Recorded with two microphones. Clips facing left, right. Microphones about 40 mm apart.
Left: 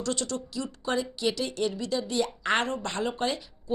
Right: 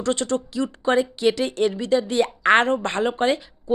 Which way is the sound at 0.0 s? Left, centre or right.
Right.